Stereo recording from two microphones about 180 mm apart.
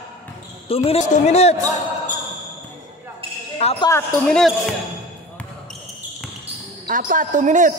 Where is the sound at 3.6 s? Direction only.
30° left (ahead or behind).